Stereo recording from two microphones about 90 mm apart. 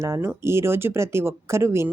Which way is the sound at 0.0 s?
35° right (ahead or behind).